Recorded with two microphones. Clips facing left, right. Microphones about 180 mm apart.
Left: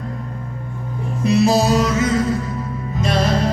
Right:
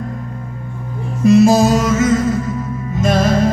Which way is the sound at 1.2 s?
45° right (ahead or behind).